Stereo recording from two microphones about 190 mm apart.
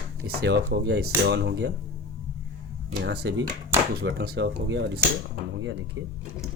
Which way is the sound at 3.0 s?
65° right (ahead or behind).